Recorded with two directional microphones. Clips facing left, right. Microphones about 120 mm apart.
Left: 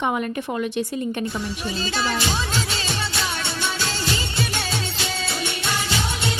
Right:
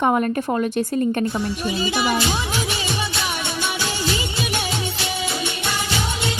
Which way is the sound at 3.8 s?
15° right (ahead or behind).